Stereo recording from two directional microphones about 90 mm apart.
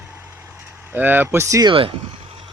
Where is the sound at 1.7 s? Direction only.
90° right.